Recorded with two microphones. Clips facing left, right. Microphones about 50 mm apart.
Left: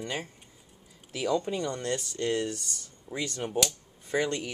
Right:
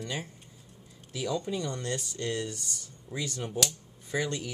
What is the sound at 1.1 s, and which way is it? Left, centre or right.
Speech, left.